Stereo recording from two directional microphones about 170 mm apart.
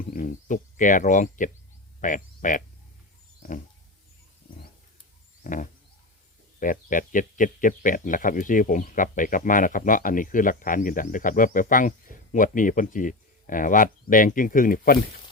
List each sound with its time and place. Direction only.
0.0 s a sound: 50° left (ahead or behind)
2.0 s frog: 50° left (ahead or behind)
5.4 s wild animals: 50° left (ahead or behind)
6.6 s speech: 50° left (ahead or behind)